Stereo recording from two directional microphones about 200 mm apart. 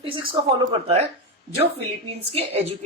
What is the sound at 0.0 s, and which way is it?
A woman's voice, 25° right (ahead or behind).